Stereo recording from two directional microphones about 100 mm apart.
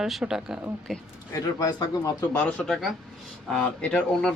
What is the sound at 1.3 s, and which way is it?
Speech, 35° left (ahead or behind).